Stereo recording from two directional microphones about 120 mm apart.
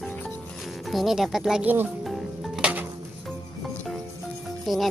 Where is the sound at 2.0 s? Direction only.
5° right (ahead or behind).